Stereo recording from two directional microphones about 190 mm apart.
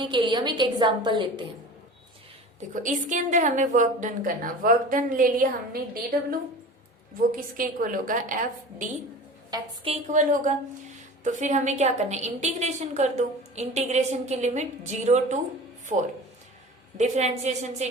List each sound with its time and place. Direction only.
0.0 s a woman's voice: 25° right (ahead or behind)
2.6 s a woman's voice: 40° right (ahead or behind)
7.3 s a woman's voice: 45° right (ahead or behind)
9.5 s a woman's voice: 30° right (ahead or behind)